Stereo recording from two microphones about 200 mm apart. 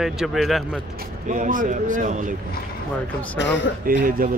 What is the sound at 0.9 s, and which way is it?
Speech, 40° right (ahead or behind).